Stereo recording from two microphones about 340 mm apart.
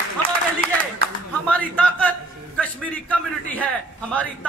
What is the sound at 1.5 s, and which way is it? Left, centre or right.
A man's voice, centre.